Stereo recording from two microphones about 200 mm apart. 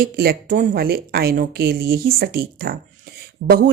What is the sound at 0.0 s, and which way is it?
Speech, 50° right (ahead or behind).